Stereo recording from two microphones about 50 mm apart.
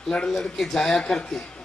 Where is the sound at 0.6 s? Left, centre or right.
Centre.